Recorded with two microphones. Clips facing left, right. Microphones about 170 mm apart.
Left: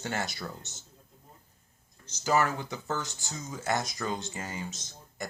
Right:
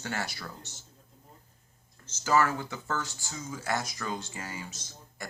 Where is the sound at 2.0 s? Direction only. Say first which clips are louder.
Right 1 dB; 15° left (ahead or behind).